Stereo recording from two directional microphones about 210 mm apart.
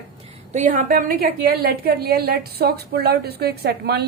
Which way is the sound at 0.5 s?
40° right (ahead or behind).